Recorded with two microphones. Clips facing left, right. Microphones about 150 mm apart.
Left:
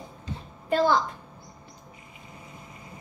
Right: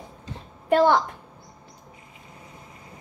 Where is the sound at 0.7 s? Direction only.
70° right (ahead or behind).